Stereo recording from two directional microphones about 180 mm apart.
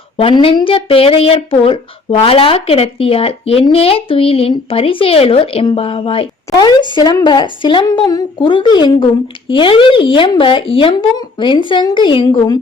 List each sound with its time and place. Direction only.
0.2 s speech: 30° left (ahead or behind)